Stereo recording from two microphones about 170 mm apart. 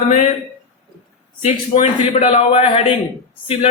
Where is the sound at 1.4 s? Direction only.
35° left (ahead or behind).